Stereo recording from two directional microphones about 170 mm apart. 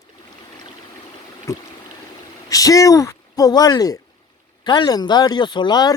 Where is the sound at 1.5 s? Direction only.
15° left (ahead or behind).